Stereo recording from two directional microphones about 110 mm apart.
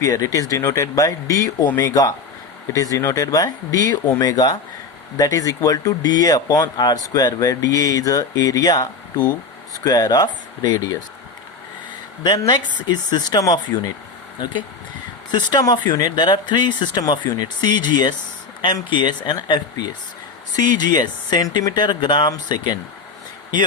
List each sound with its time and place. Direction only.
0.0 s speech: 30° left (ahead or behind)
12.2 s speech: 35° left (ahead or behind)
15.3 s speech: 40° left (ahead or behind)